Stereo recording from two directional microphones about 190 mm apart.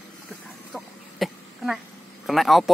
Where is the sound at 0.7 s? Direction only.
Centre (ahead or behind).